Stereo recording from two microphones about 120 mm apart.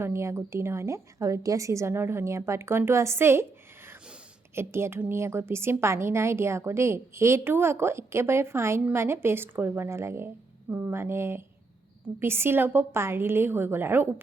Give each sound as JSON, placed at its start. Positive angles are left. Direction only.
{"t": 0.0, "sound": "a woman's voice", "side_deg": -20}
{"t": 4.5, "sound": "a woman's voice", "side_deg": -20}